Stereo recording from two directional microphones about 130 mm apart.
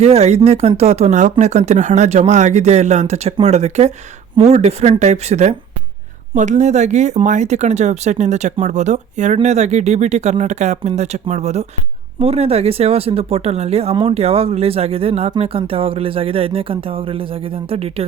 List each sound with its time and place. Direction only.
0.0 s speech: 55° right (ahead or behind)